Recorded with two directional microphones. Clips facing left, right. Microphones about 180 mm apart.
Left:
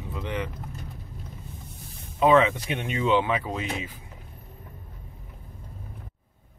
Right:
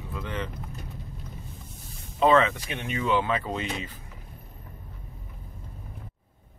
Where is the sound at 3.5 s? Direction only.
5° left (ahead or behind).